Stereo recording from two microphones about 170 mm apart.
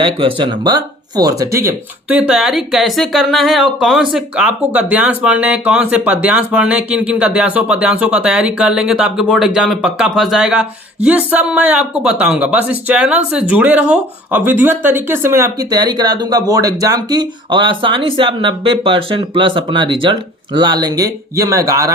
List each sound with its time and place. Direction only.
0.0 s speech: 30° right (ahead or behind)